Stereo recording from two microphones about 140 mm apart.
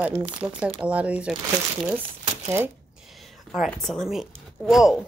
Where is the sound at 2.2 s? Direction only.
55° right (ahead or behind).